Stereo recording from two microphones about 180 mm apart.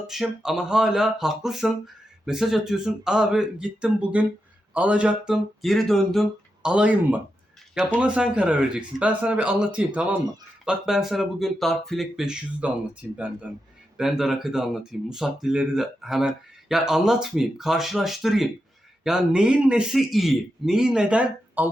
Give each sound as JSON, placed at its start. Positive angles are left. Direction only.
{"t": 0.1, "sound": "a man's voice", "side_deg": 0}